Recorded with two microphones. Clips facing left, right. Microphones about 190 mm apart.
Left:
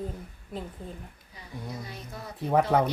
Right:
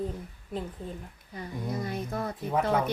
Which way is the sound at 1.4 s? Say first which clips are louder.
Right 6 dB; 55° right (ahead or behind).